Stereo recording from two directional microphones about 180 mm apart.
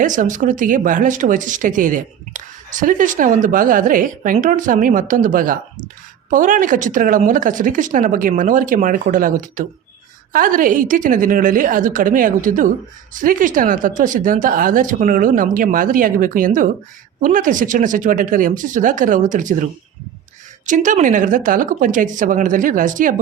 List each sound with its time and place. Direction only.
0.0 s speech: 45° right (ahead or behind)
20.7 s speech: 45° right (ahead or behind)